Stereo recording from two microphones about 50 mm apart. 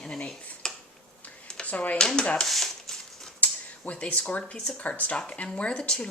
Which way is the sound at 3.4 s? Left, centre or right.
Left.